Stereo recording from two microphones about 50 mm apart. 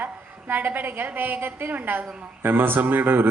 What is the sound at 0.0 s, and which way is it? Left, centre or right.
A woman's voice, right.